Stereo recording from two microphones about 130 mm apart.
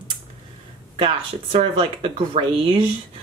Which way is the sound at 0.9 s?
45° right (ahead or behind).